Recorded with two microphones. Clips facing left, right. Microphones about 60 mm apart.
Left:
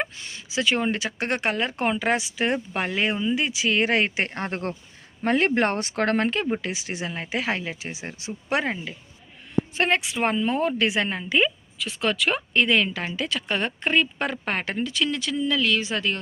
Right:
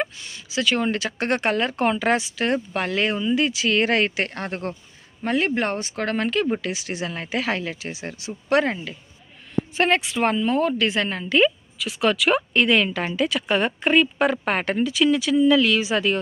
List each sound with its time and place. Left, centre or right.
0.2 s a sound: left
0.5 s speech: left
4.1 s speech: left
5.2 s speech: left
6.2 s speech: left; by 11.5 s centre
11.8 s speech: centre